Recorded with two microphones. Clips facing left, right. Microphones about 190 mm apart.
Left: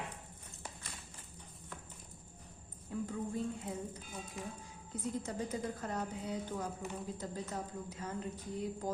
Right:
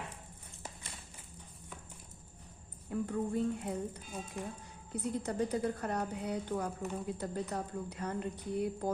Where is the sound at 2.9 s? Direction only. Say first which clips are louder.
Right 4 dB; 60° right (ahead or behind).